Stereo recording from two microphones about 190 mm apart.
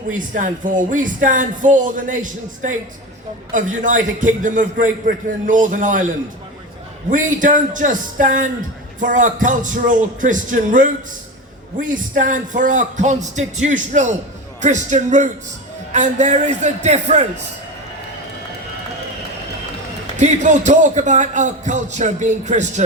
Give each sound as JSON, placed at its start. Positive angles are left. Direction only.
{"t": 0.1, "sound": "speech", "side_deg": -45}
{"t": 7.1, "sound": "a man's voice", "side_deg": -45}
{"t": 20.1, "sound": "a man's voice", "side_deg": -40}